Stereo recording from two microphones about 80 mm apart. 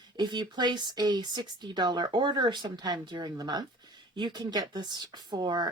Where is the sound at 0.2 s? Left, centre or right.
Right.